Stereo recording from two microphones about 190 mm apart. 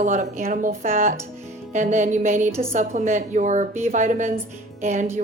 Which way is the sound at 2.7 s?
40° right (ahead or behind).